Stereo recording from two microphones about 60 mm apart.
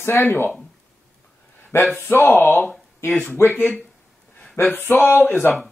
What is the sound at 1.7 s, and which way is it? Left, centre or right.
Speech, left.